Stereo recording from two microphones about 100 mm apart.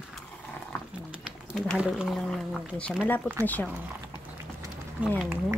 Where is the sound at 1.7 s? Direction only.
5° right (ahead or behind); by 3.7 s 15° left (ahead or behind).